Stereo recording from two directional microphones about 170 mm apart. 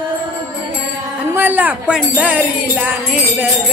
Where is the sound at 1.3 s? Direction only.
10° right (ahead or behind).